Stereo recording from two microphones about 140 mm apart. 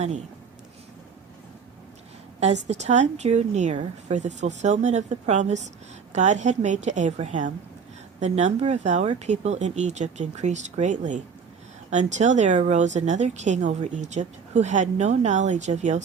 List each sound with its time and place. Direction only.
2.4 s speech: 55° right (ahead or behind)